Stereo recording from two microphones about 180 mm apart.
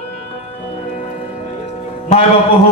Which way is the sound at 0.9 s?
45° left (ahead or behind).